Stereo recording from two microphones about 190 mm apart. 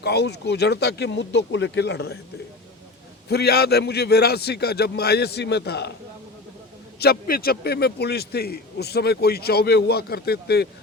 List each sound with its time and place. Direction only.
0.0 s a man's voice: 60° left (ahead or behind)
3.2 s a man's voice: 60° left (ahead or behind)
7.0 s a man's voice: 50° left (ahead or behind)